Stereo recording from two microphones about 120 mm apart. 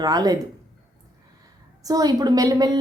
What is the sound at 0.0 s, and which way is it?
Speech, 35° right (ahead or behind).